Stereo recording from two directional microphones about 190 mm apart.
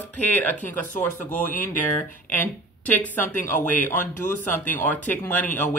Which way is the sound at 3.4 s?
45° left (ahead or behind).